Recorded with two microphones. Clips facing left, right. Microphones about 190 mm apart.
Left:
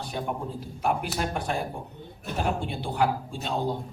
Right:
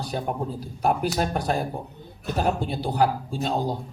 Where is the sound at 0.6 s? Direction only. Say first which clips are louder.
Right 5 dB; 40° right (ahead or behind).